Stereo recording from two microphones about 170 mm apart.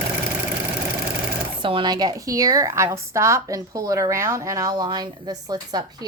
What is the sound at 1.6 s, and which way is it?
A woman's voice, 30° right (ahead or behind).